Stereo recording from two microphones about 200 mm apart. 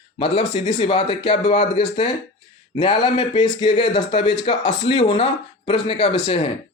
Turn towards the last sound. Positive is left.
turn(degrees=25)  # may be behind; listen again after turning